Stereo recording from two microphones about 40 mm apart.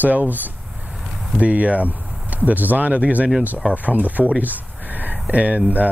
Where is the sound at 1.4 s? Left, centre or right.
Right.